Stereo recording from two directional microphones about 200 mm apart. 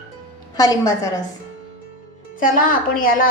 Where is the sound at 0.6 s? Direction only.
15° left (ahead or behind).